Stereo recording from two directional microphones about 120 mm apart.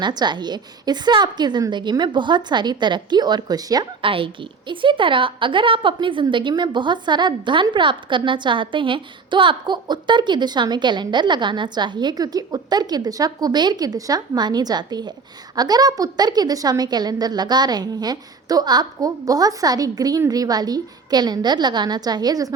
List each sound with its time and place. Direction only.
0.0 s a woman's voice: 35° right (ahead or behind)
4.0 s a woman's voice: 45° right (ahead or behind); by 22.5 s 30° right (ahead or behind)